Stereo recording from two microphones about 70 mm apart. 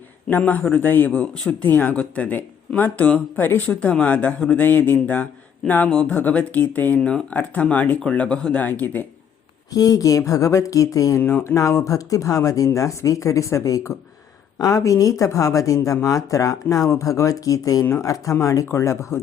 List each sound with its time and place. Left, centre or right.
0.3 s speech: left
1.1 s speech: centre
4.6 s speech: left
9.7 s speech: left
11.3 s speech: left
11.5 s speech: left